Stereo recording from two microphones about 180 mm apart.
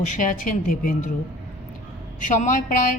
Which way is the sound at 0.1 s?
45° left (ahead or behind).